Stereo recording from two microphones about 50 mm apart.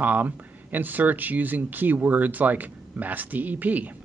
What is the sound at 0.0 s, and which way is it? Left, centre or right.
Speech, right.